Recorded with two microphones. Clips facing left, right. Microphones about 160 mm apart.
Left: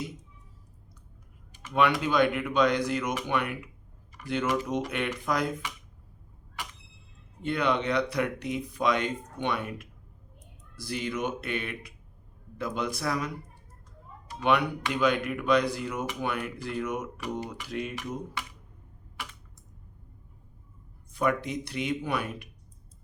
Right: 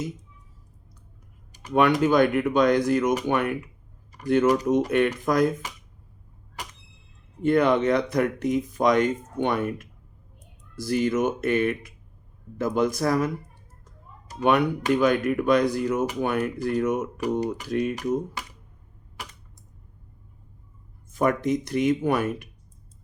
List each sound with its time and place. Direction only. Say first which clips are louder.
1.5 s speech: right 5 dB; 45° right (ahead or behind)
7.4 s speech: right 8 dB; 45° right (ahead or behind)
19.1 s typing: right 1 dB; 40° right (ahead or behind)
21.1 s speech: right 5 dB; 45° right (ahead or behind)